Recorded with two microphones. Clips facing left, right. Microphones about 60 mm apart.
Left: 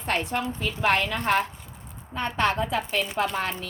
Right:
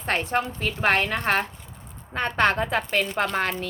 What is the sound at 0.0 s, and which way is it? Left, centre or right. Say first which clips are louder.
A woman's voice: right 2 dB; right.